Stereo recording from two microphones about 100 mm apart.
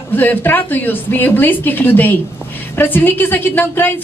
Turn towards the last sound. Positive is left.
turn(degrees=20)  # may be behind; listen again after turning